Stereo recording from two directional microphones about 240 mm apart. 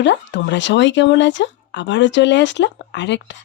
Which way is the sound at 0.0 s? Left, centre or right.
Left.